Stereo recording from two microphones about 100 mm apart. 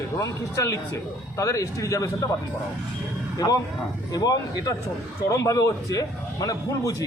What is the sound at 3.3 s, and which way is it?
A man's voice, 40° left (ahead or behind).